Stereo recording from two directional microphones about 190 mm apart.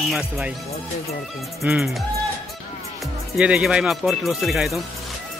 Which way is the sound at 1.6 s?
Centre (ahead or behind).